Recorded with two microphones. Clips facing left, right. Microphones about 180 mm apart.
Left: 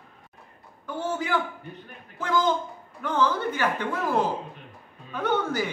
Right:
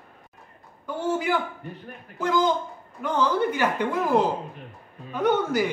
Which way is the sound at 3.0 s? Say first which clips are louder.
Right 2 dB; 15° right (ahead or behind).